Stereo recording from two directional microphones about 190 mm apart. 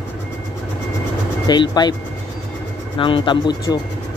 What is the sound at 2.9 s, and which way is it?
Speech, 25° left (ahead or behind).